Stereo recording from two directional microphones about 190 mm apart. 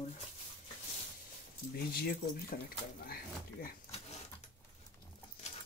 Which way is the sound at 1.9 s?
50° left (ahead or behind).